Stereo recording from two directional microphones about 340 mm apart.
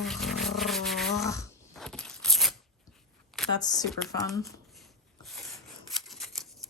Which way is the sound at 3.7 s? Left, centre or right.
Centre.